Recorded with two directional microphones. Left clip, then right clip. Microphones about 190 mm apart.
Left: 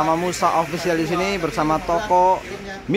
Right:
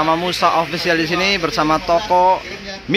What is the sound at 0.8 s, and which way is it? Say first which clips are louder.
A man's voice: right 4 dB; 5° left (ahead or behind).